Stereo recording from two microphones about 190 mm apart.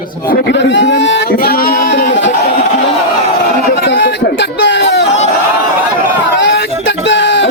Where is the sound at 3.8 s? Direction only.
70° left (ahead or behind).